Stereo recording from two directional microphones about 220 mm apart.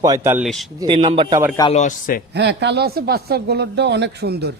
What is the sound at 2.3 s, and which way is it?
A man's voice, 50° right (ahead or behind).